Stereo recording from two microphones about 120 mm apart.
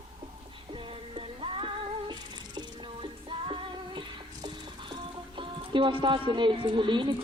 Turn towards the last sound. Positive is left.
turn(degrees=-40)  # may be behind; listen again after turning